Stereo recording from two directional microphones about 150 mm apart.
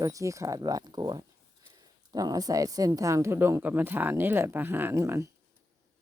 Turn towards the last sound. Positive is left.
turn(degrees=-15)  # may be behind; listen again after turning